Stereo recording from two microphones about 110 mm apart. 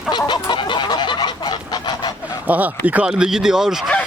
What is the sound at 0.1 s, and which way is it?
Goose, 45° left (ahead or behind).